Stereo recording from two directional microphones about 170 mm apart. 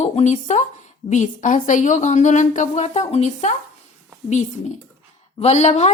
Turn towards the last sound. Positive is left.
turn(degrees=40)  # may be behind; listen again after turning